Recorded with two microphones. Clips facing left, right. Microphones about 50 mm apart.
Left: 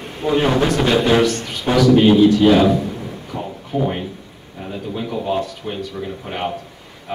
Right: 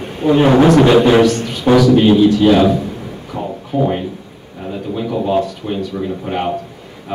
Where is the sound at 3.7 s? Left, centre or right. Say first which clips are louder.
Right 4 dB; centre.